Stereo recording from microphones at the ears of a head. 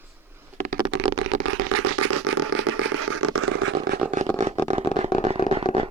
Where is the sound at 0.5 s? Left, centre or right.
Right.